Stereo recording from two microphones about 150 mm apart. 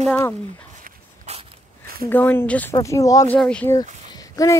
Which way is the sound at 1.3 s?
45° right (ahead or behind).